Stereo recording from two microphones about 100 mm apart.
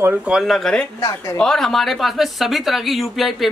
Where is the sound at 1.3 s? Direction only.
5° left (ahead or behind).